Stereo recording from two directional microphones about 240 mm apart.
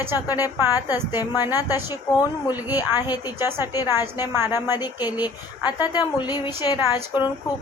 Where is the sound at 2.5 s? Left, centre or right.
Centre.